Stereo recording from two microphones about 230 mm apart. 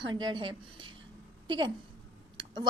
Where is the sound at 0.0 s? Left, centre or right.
Centre.